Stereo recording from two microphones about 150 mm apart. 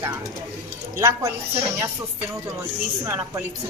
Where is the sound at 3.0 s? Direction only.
20° right (ahead or behind).